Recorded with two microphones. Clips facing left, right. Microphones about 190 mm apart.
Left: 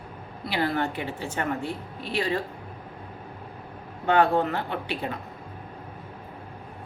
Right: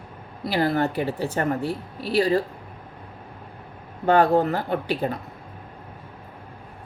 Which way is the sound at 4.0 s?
40° right (ahead or behind).